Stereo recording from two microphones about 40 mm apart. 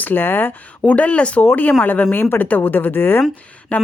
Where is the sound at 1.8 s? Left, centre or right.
Left.